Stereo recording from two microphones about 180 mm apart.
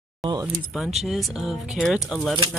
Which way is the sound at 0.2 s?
25° right (ahead or behind).